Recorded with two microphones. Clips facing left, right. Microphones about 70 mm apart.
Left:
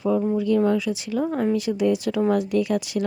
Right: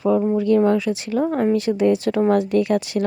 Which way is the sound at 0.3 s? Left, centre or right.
Right.